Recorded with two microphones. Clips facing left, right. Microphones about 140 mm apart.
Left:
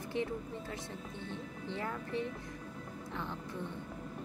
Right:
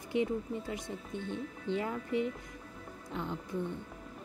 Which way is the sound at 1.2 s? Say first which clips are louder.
Right 7 dB; 15° right (ahead or behind).